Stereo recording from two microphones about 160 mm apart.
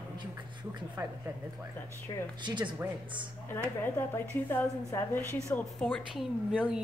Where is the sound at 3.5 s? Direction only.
15° left (ahead or behind).